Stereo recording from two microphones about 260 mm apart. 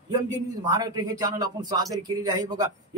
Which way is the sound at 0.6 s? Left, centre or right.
Centre.